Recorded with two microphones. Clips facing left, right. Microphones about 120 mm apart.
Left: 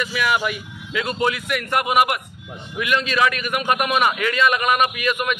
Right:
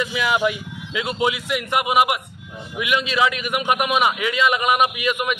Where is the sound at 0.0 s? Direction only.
20° right (ahead or behind).